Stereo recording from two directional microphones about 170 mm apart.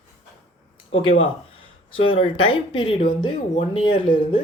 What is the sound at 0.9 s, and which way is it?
Speech, 35° left (ahead or behind).